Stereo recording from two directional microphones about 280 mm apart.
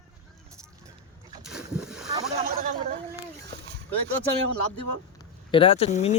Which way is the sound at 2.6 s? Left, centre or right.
Right.